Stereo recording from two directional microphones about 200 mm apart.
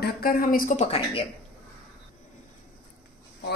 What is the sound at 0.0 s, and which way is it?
Speech, 45° left (ahead or behind).